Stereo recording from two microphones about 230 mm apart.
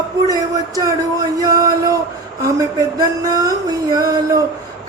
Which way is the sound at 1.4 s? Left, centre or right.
Centre.